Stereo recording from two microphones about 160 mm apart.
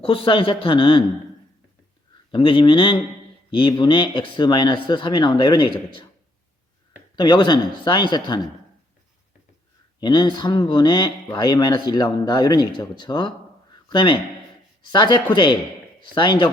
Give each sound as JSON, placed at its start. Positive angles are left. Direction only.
{"t": 0.0, "sound": "speech", "side_deg": 35}
{"t": 2.3, "sound": "speech", "side_deg": 30}
{"t": 7.2, "sound": "speech", "side_deg": 30}
{"t": 10.0, "sound": "a man's voice", "side_deg": 25}